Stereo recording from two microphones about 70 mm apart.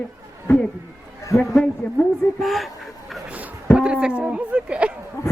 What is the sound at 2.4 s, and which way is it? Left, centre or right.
Speech, centre.